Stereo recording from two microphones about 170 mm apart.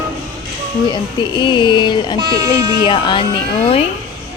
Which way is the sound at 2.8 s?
30° left (ahead or behind).